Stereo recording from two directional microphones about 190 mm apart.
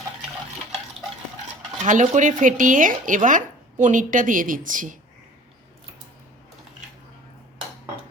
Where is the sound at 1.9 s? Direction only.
40° right (ahead or behind).